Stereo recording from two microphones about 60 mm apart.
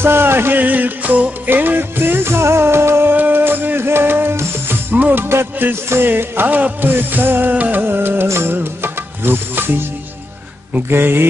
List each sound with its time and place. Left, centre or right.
0.0 s music: right
0.6 s music: right
5.2 s music: right